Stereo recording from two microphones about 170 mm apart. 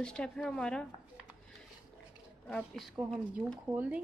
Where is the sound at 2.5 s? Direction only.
5° left (ahead or behind).